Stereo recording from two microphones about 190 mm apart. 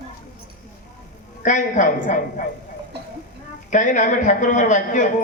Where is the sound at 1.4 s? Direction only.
40° left (ahead or behind).